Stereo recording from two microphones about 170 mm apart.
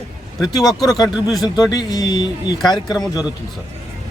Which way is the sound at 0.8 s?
25° left (ahead or behind).